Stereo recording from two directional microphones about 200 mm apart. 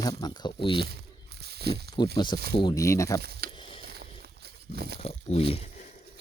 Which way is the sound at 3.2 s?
50° right (ahead or behind).